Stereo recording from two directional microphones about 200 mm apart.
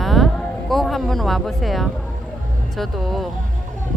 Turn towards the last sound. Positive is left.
turn(degrees=0)  # may be behind; listen again after turning